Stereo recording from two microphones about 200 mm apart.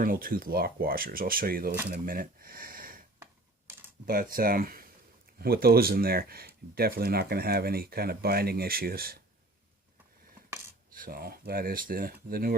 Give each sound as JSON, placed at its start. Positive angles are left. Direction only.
{"t": 0.0, "sound": "speech", "side_deg": -45}
{"t": 3.7, "sound": "computer keyboard", "side_deg": -10}
{"t": 4.0, "sound": "speech", "side_deg": -45}
{"t": 10.9, "sound": "speech", "side_deg": -45}